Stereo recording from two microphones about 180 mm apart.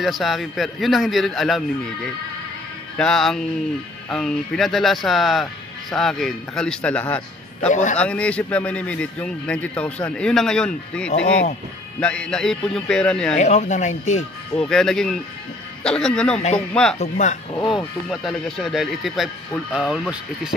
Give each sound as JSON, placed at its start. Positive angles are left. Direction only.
{"t": 0.0, "sound": "speech", "side_deg": 0}
{"t": 3.0, "sound": "speech", "side_deg": 5}
{"t": 7.7, "sound": "a man's voice", "side_deg": 45}
{"t": 8.0, "sound": "a man's voice", "side_deg": 5}
{"t": 13.4, "sound": "speech", "side_deg": 40}
{"t": 14.6, "sound": "speech", "side_deg": 5}
{"t": 17.0, "sound": "speech", "side_deg": 40}
{"t": 17.6, "sound": "speech", "side_deg": 0}